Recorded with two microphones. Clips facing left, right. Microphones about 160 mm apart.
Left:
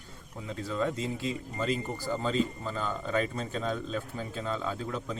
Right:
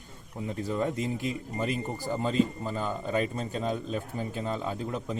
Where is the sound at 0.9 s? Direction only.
20° left (ahead or behind).